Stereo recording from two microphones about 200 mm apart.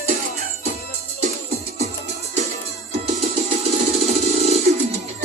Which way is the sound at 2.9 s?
30° right (ahead or behind).